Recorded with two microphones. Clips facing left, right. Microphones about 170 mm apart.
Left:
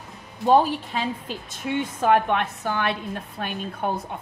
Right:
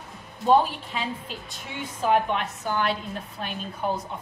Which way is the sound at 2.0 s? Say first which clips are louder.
Left 2 dB; 60° left (ahead or behind).